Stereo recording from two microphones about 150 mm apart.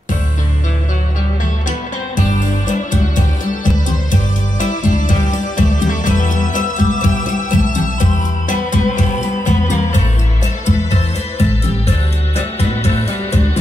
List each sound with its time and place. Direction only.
2.1 s music: 60° left (ahead or behind)
12.4 s music: 45° left (ahead or behind)